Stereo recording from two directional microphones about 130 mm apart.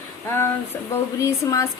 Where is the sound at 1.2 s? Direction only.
20° left (ahead or behind).